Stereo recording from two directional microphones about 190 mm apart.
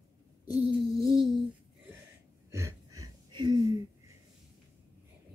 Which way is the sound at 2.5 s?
15° right (ahead or behind).